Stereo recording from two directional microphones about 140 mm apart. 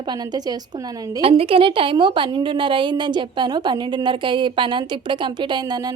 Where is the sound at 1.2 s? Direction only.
40° right (ahead or behind).